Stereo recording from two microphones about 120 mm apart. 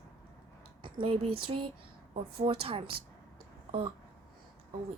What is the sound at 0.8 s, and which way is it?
A woman's voice, 50° right (ahead or behind).